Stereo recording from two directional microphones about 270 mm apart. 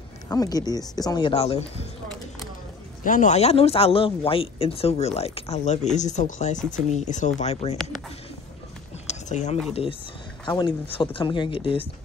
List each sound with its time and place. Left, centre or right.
0.3 s speech: centre
3.0 s speech: left
7.7 s speech: centre
9.0 s a sound: left
10.4 s speech: centre